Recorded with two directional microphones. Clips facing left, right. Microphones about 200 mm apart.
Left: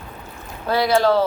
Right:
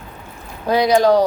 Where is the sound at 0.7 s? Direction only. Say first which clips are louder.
Right 4 dB; 15° right (ahead or behind).